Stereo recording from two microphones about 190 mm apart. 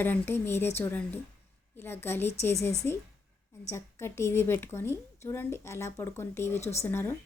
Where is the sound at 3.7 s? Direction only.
15° left (ahead or behind).